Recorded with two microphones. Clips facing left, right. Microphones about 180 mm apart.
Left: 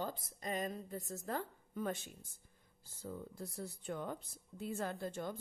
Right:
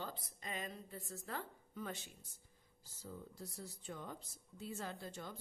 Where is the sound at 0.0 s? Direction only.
45° left (ahead or behind).